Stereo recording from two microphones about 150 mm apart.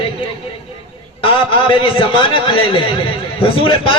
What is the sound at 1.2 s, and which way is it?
Speech, 35° left (ahead or behind).